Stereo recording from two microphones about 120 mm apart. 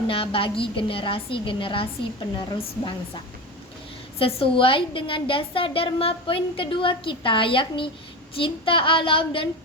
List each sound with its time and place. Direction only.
0.1 s a woman's voice: 50° left (ahead or behind)
4.2 s a woman's voice: 50° left (ahead or behind)